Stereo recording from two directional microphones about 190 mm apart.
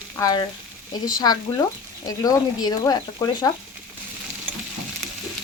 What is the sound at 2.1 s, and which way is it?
Speech, 20° left (ahead or behind).